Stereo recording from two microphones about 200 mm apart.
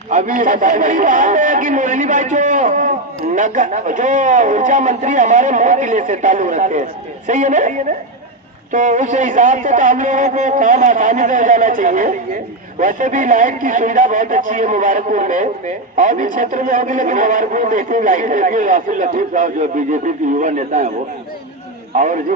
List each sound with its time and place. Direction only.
0.1 s a man's voice: 40° right (ahead or behind)
21.9 s a man's voice: 40° right (ahead or behind)